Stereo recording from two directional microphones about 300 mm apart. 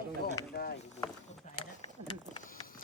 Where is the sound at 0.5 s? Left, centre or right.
Left.